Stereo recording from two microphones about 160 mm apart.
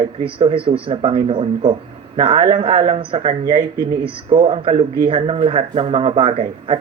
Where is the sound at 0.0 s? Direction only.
35° right (ahead or behind).